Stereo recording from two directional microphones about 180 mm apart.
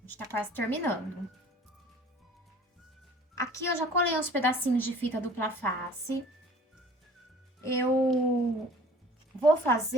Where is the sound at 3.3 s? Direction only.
15° left (ahead or behind).